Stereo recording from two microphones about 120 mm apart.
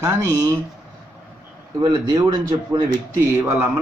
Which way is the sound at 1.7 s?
35° right (ahead or behind).